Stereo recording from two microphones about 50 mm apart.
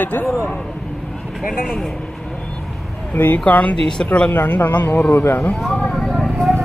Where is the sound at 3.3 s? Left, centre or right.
Left.